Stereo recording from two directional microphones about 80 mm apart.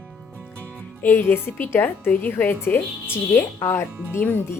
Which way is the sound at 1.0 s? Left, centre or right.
Left.